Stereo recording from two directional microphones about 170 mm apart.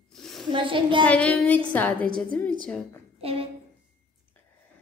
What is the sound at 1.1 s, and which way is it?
A woman's voice, 10° left (ahead or behind).